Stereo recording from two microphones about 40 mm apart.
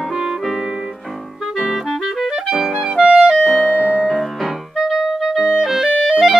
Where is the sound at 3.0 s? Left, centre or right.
Right.